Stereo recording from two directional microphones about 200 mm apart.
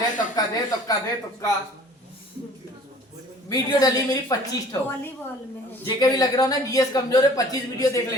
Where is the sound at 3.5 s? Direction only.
20° left (ahead or behind).